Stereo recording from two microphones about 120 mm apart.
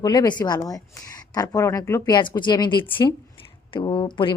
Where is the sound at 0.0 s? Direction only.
35° left (ahead or behind).